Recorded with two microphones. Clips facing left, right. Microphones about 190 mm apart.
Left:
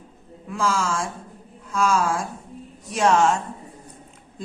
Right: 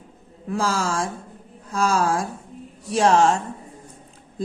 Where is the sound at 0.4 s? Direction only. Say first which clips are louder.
Right 1 dB; 35° right (ahead or behind).